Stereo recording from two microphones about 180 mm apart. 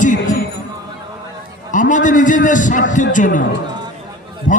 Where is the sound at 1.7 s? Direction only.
45° left (ahead or behind).